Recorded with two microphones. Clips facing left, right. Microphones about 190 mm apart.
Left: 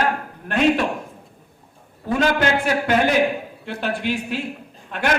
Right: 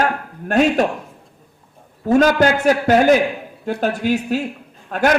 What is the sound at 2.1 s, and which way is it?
A man's voice, 40° right (ahead or behind).